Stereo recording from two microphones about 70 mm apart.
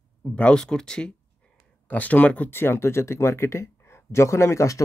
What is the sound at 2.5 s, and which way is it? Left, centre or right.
Speech, left.